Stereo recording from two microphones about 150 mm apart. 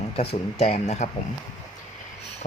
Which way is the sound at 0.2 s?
45° left (ahead or behind).